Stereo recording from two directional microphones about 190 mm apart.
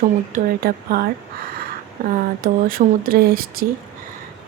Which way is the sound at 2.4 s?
50° right (ahead or behind).